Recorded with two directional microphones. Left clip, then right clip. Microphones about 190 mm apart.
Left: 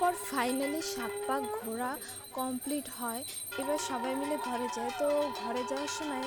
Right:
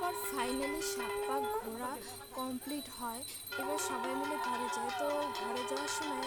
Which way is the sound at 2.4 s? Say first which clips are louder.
Left 5 dB; 15° left (ahead or behind).